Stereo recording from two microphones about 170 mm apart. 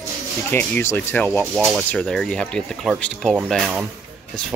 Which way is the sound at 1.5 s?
Centre (ahead or behind).